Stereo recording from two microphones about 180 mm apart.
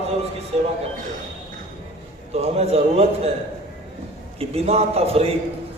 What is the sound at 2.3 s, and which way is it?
Speech, 35° right (ahead or behind).